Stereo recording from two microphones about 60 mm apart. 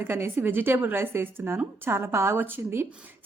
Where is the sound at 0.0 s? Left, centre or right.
Right.